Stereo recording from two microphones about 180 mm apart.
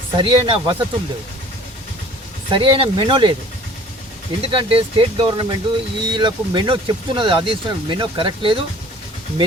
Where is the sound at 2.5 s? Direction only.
30° right (ahead or behind).